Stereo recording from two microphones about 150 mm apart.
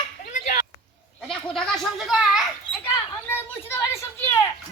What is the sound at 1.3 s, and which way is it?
A child's voice, 5° left (ahead or behind).